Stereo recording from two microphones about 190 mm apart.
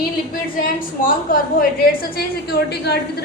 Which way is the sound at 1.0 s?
45° left (ahead or behind).